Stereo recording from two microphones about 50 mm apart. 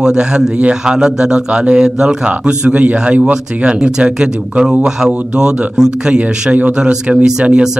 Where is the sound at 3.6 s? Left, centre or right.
Centre.